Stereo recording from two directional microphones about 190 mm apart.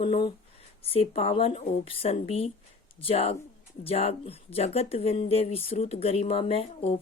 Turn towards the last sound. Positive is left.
turn(degrees=30)  # may be behind; listen again after turning